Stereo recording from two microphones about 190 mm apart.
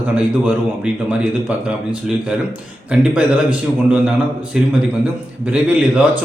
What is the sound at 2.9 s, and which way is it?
A man's voice, 5° right (ahead or behind).